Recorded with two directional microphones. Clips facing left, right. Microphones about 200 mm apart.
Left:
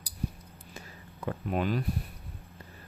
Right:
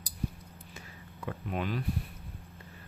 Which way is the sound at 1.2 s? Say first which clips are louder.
Left 4 dB; 40° left (ahead or behind).